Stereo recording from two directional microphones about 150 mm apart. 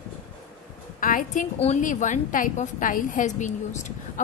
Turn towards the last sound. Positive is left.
turn(degrees=55)  # may be behind; listen again after turning